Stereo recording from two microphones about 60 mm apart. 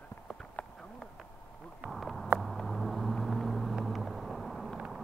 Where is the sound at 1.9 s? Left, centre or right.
Centre.